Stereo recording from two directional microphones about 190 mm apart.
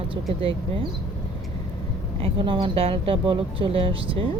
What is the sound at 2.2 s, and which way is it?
Speech, 30° right (ahead or behind).